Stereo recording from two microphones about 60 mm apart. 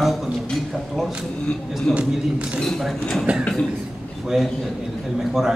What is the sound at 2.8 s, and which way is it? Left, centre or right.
Speech, centre.